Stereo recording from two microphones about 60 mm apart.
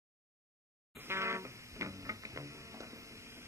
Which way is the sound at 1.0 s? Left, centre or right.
Right.